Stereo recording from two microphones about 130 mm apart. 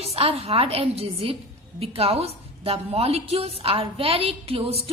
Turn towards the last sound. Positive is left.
turn(degrees=-50)  # may be behind; listen again after turning